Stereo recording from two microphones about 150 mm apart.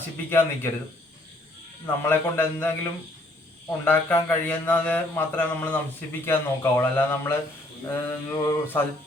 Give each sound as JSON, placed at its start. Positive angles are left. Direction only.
{"t": 0.3, "sound": "speech", "side_deg": 15}
{"t": 2.0, "sound": "speech", "side_deg": 15}